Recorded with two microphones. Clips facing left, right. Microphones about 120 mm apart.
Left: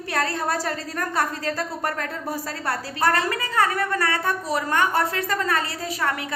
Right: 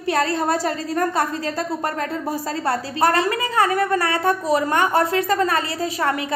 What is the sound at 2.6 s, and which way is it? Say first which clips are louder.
A woman's voice: right 3 dB; 20° right (ahead or behind).